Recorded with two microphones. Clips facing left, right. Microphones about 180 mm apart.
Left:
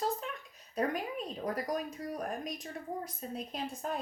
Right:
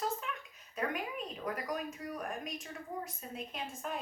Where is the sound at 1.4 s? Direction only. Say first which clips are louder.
Left 3 dB; 35° left (ahead or behind).